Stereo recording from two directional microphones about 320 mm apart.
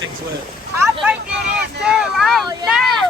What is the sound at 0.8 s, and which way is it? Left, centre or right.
Vehicle, centre.